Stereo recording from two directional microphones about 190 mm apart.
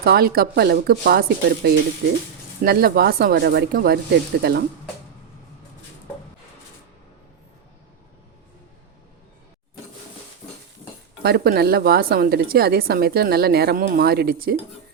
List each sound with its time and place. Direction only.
0.0 s a woman's voice: 55° right (ahead or behind)
11.2 s a woman's voice: 55° right (ahead or behind)